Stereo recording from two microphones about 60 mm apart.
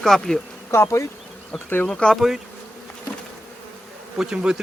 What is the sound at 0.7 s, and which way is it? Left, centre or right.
Bee, left.